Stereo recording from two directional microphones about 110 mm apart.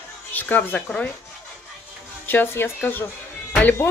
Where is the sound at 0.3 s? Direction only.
15° left (ahead or behind).